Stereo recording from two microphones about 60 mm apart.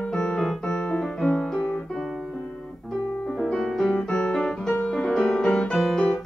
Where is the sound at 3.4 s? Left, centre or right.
Centre.